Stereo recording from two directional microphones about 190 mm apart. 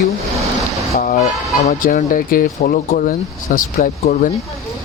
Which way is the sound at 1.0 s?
35° left (ahead or behind).